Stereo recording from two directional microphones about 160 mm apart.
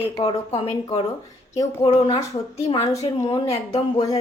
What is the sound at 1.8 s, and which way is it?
Speech, 40° left (ahead or behind).